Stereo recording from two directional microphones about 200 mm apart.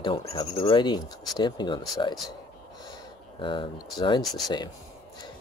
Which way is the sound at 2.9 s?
25° left (ahead or behind).